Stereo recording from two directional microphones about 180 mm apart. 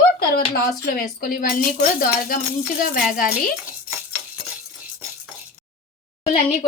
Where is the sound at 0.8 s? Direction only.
55° left (ahead or behind).